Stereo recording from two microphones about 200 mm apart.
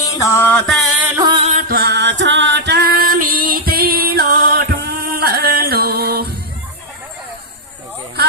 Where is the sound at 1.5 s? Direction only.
40° right (ahead or behind).